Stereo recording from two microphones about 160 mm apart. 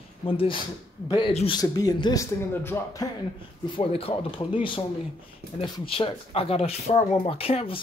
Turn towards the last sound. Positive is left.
turn(degrees=35)  # may be behind; listen again after turning